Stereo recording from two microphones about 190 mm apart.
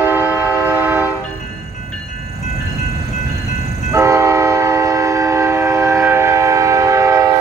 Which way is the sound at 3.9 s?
15° right (ahead or behind).